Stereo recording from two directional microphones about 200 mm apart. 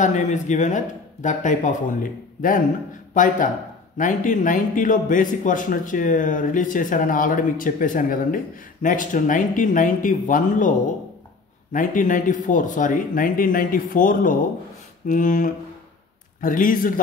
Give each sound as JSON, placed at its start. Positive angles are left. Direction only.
{"t": 0.0, "sound": "a man's voice", "side_deg": 40}
{"t": 3.2, "sound": "a man's voice", "side_deg": 40}
{"t": 11.7, "sound": "a man's voice", "side_deg": 40}